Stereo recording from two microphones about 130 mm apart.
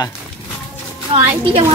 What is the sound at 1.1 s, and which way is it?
Speech, 45° right (ahead or behind).